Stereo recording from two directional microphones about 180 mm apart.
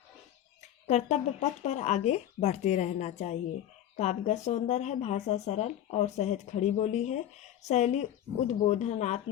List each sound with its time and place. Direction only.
0.9 s speech: 40° left (ahead or behind)